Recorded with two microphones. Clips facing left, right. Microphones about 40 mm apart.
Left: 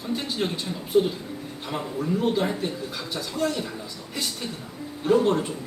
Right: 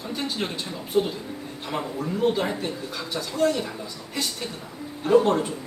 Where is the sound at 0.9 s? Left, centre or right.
Centre.